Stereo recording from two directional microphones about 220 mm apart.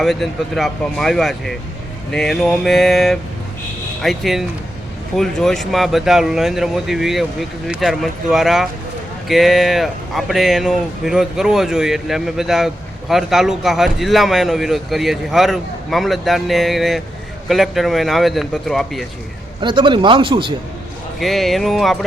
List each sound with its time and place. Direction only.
0.0 s speech: centre (ahead or behind)
19.6 s speech: 20° right (ahead or behind)
21.2 s speech: centre (ahead or behind)